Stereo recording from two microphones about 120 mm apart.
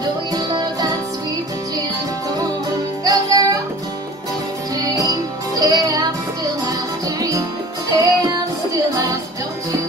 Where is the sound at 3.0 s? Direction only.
30° right (ahead or behind).